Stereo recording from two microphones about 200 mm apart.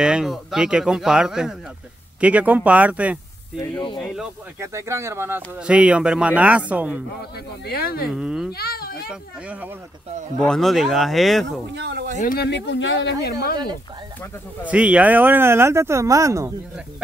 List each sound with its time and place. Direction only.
0.0 s speech: 5° right (ahead or behind)
4.6 s speech: 15° right (ahead or behind)
7.6 s speech: 50° left (ahead or behind)
8.1 s speech: 5° right (ahead or behind)
8.5 s speech: 50° left (ahead or behind)
9.1 s speech: 5° right (ahead or behind)
11.7 s speech: 55° right (ahead or behind)
12.2 s speech: 50° left (ahead or behind)
14.7 s speech: 5° right (ahead or behind)